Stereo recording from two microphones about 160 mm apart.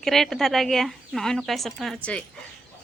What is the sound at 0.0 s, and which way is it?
Speech, centre (ahead or behind).